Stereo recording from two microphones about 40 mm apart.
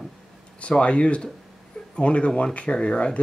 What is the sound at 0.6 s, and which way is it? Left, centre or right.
Speech, left.